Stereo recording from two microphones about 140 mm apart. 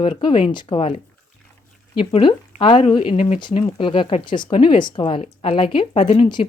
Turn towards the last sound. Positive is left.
turn(degrees=35)  # may be behind; listen again after turning